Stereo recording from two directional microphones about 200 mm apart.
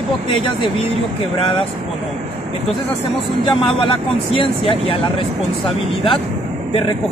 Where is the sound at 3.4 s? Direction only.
25° left (ahead or behind).